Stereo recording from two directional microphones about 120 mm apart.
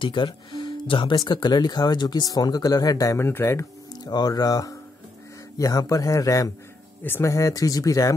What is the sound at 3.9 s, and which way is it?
Speech, 35° left (ahead or behind).